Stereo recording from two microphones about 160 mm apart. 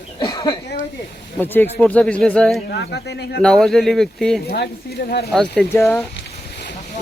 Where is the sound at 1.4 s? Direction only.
10° left (ahead or behind).